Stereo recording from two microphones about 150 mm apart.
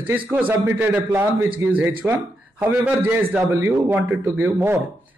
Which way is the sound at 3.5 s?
20° right (ahead or behind).